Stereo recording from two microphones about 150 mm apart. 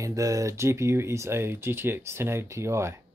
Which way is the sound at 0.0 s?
20° right (ahead or behind).